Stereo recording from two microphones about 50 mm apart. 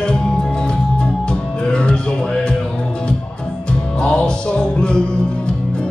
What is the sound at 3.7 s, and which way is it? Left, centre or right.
Music, centre.